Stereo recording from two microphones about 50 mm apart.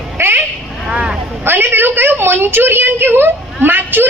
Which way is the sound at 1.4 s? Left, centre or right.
Right.